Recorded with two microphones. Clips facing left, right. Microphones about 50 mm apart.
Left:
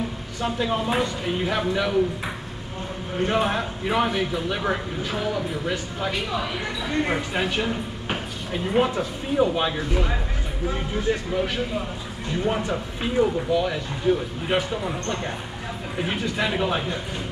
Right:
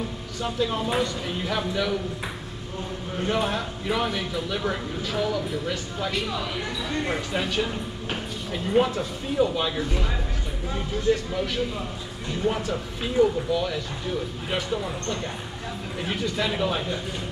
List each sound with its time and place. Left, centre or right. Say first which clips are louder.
0.4 s speech: left 2 dB; centre
3.3 s speech: left 2 dB; centre